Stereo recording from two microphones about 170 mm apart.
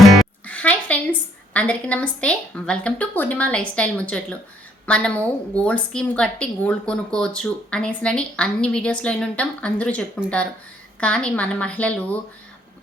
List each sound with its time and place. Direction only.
0.1 s music: 5° left (ahead or behind)
1.5 s a woman's voice: 5° left (ahead or behind)